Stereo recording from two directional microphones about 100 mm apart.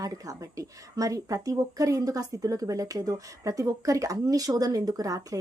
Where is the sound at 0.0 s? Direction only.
35° right (ahead or behind).